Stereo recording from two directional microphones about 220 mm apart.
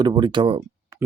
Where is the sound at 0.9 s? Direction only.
10° right (ahead or behind).